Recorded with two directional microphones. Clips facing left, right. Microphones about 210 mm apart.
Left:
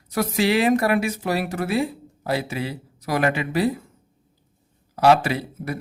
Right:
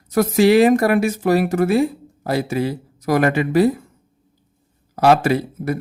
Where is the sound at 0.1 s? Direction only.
45° right (ahead or behind).